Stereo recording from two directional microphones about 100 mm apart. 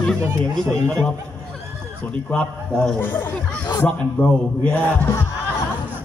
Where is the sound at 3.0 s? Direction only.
20° left (ahead or behind).